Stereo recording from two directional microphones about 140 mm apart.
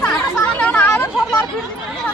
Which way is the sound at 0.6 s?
10° left (ahead or behind).